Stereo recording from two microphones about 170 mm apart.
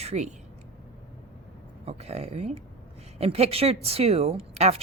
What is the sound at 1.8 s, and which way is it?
A woman's voice, 40° right (ahead or behind).